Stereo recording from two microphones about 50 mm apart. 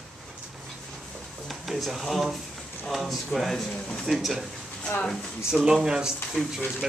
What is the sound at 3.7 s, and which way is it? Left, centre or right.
Speech, centre.